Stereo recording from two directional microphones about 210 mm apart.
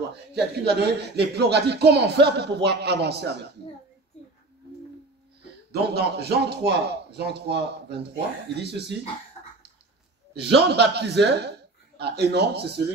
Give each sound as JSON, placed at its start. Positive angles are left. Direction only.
{"t": 0.1, "sound": "speech", "side_deg": -50}
{"t": 5.7, "sound": "speech", "side_deg": -50}
{"t": 10.3, "sound": "speech", "side_deg": -50}